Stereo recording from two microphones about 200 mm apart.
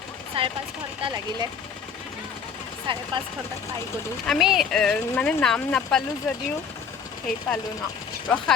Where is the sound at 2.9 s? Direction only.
25° right (ahead or behind).